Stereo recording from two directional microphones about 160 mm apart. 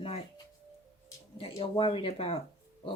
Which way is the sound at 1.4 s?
35° left (ahead or behind).